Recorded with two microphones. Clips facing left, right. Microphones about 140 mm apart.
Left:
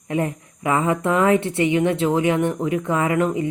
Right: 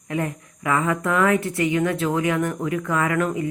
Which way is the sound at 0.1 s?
25° left (ahead or behind).